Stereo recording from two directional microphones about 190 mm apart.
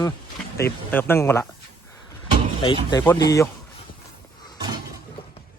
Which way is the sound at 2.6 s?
25° left (ahead or behind).